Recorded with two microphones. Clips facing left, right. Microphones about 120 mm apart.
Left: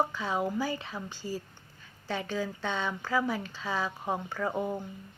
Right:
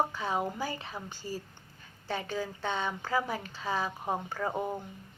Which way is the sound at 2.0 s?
15° right (ahead or behind).